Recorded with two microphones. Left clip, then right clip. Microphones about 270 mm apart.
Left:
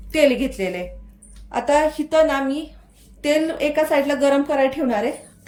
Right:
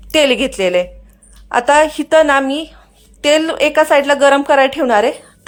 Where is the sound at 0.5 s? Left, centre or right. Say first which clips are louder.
Right 12 dB; right.